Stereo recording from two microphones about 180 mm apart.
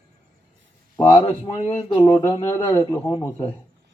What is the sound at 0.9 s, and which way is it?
Speech, 15° left (ahead or behind).